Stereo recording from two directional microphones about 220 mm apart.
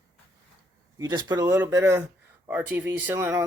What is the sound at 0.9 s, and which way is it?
Speech, 20° right (ahead or behind).